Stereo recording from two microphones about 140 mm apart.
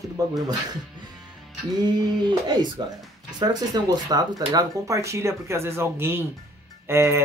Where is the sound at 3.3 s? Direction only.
30° right (ahead or behind).